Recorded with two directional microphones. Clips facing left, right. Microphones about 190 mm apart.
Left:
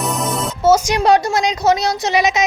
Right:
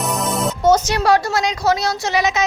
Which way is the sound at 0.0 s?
Centre (ahead or behind).